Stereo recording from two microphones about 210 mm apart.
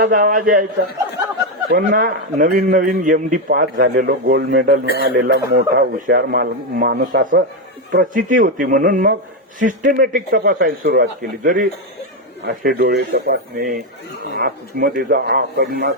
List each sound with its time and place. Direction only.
0.0 s a man's voice: 40° right (ahead or behind)
1.7 s a man's voice: 40° right (ahead or behind)